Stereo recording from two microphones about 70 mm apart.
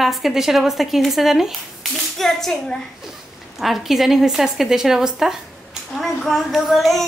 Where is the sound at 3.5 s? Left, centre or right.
Centre.